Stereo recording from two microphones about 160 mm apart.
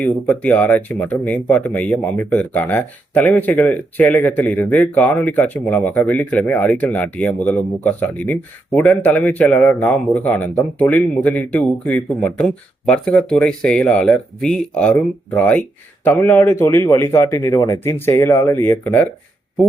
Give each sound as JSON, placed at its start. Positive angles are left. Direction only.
{"t": 0.0, "sound": "speech", "side_deg": 10}